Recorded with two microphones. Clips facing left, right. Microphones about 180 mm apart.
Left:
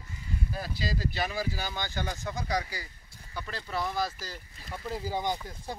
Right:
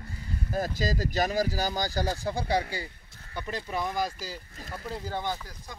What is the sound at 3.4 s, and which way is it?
Speech, 15° right (ahead or behind).